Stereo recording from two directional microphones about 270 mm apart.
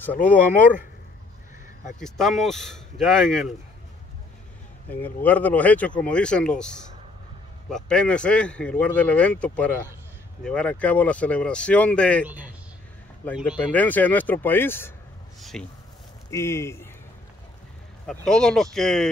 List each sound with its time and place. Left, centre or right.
0.2 s speech: left
2.0 s speech: centre
4.8 s a man's voice: centre
18.0 s speech: centre